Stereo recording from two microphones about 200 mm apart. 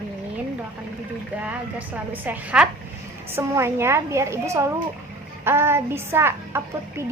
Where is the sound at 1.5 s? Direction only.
10° right (ahead or behind).